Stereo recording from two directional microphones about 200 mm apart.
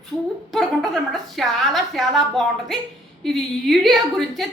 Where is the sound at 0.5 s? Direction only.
Centre (ahead or behind).